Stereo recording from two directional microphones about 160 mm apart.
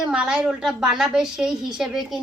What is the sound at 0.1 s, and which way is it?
A woman's voice, 5° right (ahead or behind).